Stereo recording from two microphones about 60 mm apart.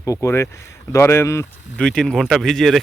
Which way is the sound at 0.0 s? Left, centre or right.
Left.